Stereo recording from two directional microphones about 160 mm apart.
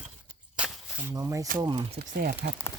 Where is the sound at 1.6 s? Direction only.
30° right (ahead or behind).